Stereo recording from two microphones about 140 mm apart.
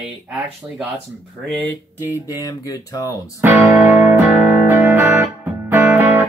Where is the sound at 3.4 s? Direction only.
10° right (ahead or behind).